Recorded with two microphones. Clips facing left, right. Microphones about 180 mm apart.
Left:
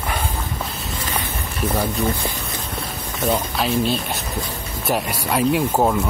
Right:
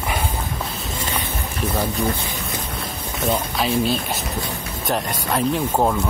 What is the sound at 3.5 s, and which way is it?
Speech, centre (ahead or behind).